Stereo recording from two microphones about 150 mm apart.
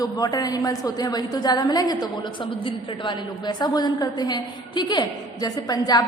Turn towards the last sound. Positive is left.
turn(degrees=25)  # may be behind; listen again after turning